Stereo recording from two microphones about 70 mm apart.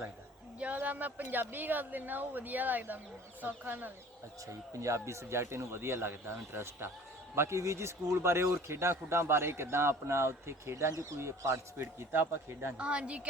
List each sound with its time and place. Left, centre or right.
0.6 s speech: right
4.8 s speech: right
12.7 s speech: centre